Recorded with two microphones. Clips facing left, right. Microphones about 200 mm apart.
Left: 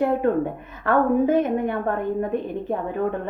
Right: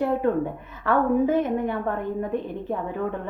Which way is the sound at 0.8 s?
55° left (ahead or behind).